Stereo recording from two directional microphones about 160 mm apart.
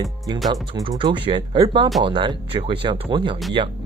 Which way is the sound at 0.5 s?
30° right (ahead or behind).